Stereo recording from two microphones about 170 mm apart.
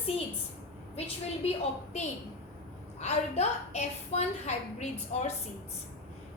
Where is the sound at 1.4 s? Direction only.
35° left (ahead or behind).